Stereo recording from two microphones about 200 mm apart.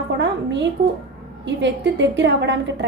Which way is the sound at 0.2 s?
60° right (ahead or behind).